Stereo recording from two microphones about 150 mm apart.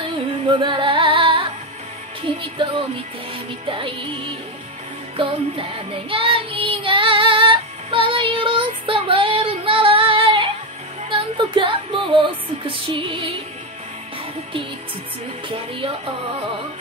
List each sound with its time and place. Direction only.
0.5 s music: 35° right (ahead or behind)